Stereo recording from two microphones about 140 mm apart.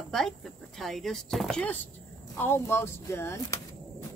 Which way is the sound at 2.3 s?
15° left (ahead or behind).